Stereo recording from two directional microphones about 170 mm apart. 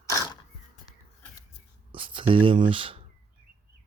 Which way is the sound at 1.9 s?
30° right (ahead or behind).